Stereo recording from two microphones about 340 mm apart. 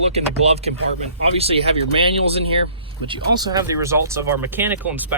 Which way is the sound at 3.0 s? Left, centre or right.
Centre.